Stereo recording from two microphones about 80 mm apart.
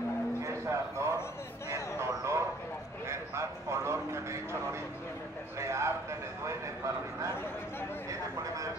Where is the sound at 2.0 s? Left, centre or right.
Right.